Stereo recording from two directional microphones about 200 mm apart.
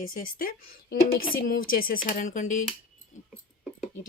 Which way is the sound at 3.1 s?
40° left (ahead or behind).